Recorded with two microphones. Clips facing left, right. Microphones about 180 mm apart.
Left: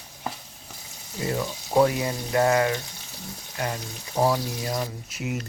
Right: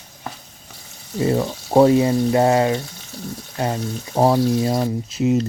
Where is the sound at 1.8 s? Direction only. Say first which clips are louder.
Right 12 dB; 30° right (ahead or behind).